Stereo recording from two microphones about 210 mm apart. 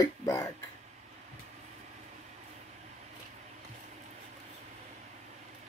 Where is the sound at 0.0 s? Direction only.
15° left (ahead or behind).